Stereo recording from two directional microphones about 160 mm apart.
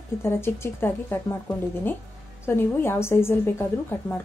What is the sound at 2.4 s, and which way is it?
Speech, 15° left (ahead or behind).